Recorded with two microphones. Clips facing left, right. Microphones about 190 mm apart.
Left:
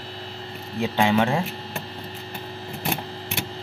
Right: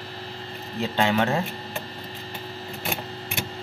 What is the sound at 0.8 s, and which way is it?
Speech, 15° left (ahead or behind).